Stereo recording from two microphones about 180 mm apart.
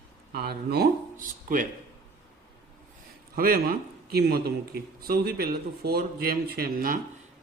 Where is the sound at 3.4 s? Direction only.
55° right (ahead or behind).